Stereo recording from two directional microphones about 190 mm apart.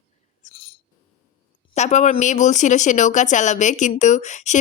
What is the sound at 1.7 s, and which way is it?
Speech, 35° left (ahead or behind).